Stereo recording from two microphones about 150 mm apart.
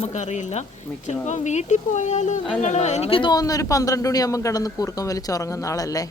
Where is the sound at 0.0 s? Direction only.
50° left (ahead or behind).